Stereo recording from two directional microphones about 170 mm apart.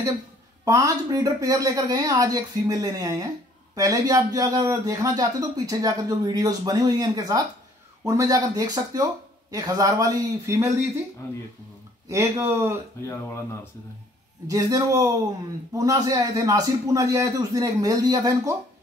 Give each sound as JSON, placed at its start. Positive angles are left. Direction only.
{"t": 0.7, "sound": "a man's voice", "side_deg": -20}
{"t": 12.1, "sound": "speech", "side_deg": -15}
{"t": 14.5, "sound": "a man's voice", "side_deg": -20}